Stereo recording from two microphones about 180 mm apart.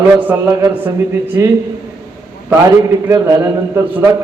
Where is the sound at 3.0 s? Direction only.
15° right (ahead or behind).